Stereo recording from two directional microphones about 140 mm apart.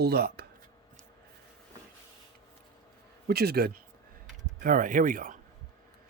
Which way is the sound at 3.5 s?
90° right.